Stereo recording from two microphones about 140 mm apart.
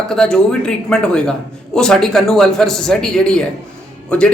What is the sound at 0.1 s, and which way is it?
A man's voice, 5° left (ahead or behind).